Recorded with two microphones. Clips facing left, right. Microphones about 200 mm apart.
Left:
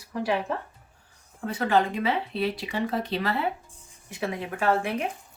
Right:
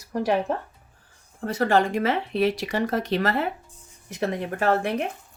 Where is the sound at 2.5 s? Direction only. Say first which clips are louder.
Right 3 dB; 80° right.